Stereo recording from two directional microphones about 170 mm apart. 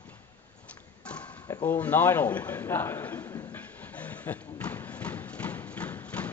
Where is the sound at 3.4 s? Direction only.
10° left (ahead or behind).